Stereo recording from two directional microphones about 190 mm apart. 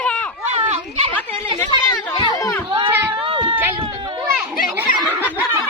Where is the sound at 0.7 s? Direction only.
30° right (ahead or behind).